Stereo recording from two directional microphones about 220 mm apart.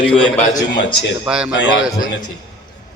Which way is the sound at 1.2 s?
5° right (ahead or behind).